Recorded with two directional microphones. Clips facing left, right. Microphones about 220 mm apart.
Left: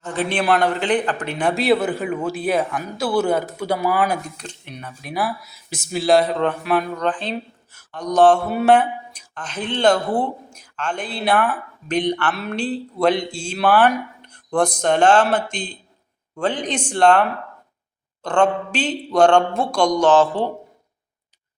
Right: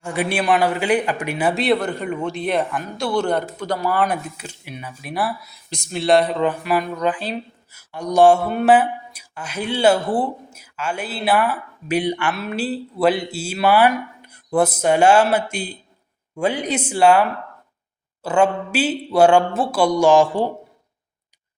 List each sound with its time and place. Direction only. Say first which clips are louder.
0.0 s a man's voice: even; 10° right (ahead or behind)